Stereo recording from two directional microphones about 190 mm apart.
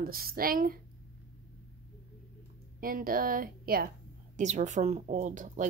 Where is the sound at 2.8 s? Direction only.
50° right (ahead or behind).